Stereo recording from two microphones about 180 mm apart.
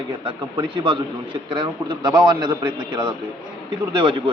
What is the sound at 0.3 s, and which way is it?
A man's voice, 25° right (ahead or behind).